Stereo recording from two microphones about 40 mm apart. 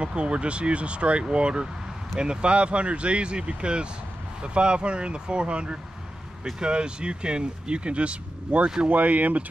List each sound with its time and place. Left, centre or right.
0.0 s speech: right
8.8 s speech: right